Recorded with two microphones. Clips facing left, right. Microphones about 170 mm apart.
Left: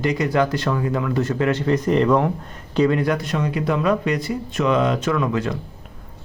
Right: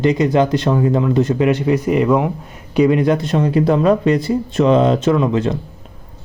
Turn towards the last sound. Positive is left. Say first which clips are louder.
# right 6 dB
turn(degrees=-25)  # may be behind; listen again after turning